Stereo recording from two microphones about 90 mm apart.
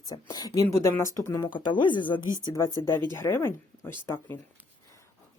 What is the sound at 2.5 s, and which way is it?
Speech, 45° left (ahead or behind).